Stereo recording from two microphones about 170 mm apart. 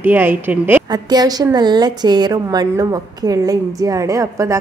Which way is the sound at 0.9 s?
25° right (ahead or behind).